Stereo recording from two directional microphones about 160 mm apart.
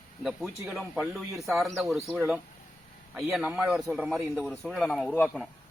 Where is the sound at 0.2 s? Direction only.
Centre (ahead or behind).